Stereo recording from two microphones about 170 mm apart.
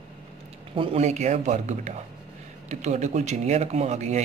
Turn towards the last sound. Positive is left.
turn(degrees=-40)  # may be behind; listen again after turning